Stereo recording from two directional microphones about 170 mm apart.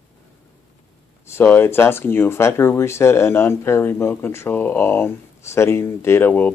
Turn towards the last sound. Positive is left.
turn(degrees=10)  # may be behind; listen again after turning